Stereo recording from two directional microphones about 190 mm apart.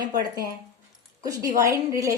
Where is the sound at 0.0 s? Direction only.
20° right (ahead or behind).